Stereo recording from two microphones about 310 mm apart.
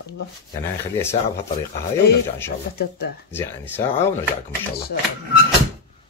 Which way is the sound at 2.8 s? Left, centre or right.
Left.